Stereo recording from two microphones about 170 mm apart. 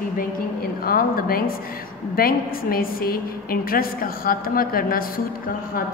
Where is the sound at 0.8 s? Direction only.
60° left (ahead or behind).